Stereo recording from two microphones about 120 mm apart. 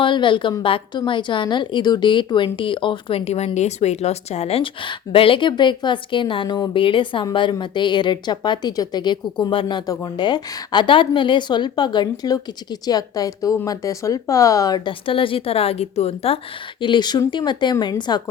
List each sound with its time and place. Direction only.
0.0 s a woman's voice: 45° left (ahead or behind)
14.8 s speech: 45° left (ahead or behind)
16.8 s a woman's voice: 40° left (ahead or behind)